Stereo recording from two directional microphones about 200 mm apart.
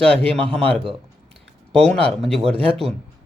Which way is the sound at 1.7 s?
5° left (ahead or behind).